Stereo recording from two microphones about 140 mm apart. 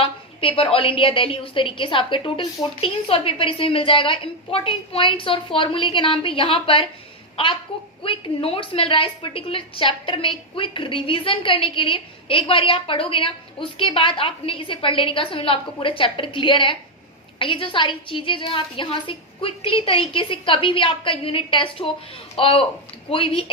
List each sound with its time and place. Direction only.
0.0 s a woman's voice: 40° left (ahead or behind)